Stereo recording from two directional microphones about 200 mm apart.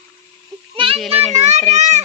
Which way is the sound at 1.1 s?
35° right (ahead or behind).